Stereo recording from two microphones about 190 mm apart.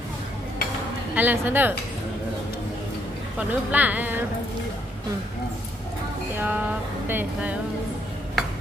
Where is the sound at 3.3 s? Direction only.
10° right (ahead or behind).